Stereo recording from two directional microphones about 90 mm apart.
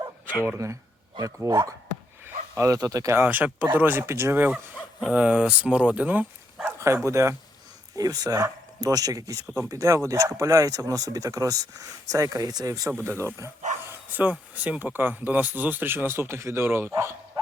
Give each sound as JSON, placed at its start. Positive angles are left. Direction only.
{"t": 0.4, "sound": "speech", "side_deg": -30}
{"t": 2.2, "sound": "a sound", "side_deg": -35}
{"t": 2.7, "sound": "speech", "side_deg": -40}
{"t": 3.2, "sound": "speech", "side_deg": -20}
{"t": 6.7, "sound": "speech", "side_deg": -30}
{"t": 7.9, "sound": "speech", "side_deg": -45}
{"t": 13.1, "sound": "speech", "side_deg": -30}
{"t": 14.2, "sound": "speech", "side_deg": -15}